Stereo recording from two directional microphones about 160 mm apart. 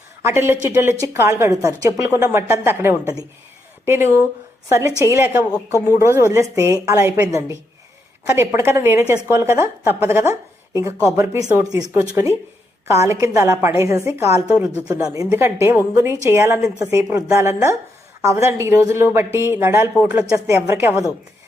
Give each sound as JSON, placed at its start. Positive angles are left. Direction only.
{"t": 0.2, "sound": "a woman's voice", "side_deg": -15}
{"t": 11.4, "sound": "a woman's voice", "side_deg": -20}
{"t": 14.8, "sound": "a woman's voice", "side_deg": -20}